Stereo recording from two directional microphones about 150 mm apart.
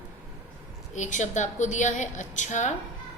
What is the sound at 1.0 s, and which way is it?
A woman's voice, 55° left (ahead or behind).